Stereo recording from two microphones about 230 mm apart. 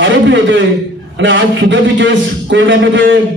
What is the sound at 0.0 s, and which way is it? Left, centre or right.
A man's voice, right.